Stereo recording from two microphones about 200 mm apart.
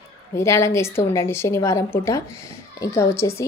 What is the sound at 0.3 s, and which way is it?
A woman's voice, 15° left (ahead or behind).